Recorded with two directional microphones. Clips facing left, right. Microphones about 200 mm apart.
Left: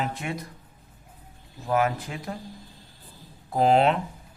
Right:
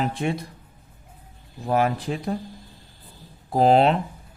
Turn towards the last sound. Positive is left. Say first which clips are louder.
# right 3 dB
turn(degrees=-35)  # may be behind; listen again after turning